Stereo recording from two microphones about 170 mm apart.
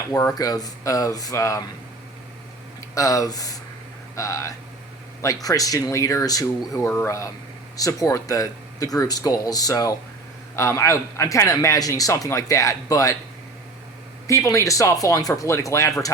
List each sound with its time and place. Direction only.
0.3 s a man's voice: 20° left (ahead or behind)
2.9 s a man's voice: 20° left (ahead or behind)
14.3 s a man's voice: 20° left (ahead or behind)